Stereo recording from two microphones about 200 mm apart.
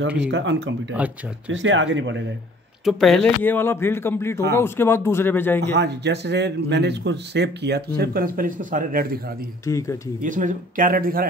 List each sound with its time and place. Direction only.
0.3 s speech: 65° right (ahead or behind)
2.8 s speech: centre (ahead or behind)
5.6 s speech: 55° right (ahead or behind)
9.7 s speech: 15° left (ahead or behind)
10.2 s speech: 40° right (ahead or behind)